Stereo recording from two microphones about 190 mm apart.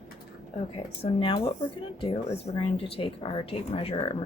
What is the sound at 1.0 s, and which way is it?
Speech, 30° left (ahead or behind).